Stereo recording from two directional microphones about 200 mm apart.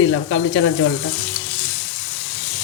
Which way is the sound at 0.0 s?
70° left (ahead or behind).